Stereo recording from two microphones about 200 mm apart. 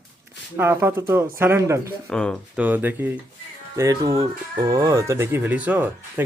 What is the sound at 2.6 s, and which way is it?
Speech, 10° right (ahead or behind).